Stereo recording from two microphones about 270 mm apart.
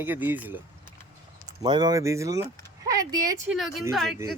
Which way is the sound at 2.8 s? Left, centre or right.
Centre.